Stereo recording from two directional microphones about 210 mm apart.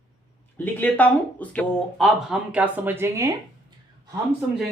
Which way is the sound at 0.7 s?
5° left (ahead or behind).